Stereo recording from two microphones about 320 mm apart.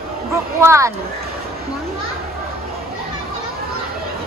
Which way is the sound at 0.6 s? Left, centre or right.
Centre.